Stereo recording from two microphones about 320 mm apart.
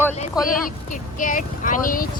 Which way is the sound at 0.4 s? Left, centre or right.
Centre.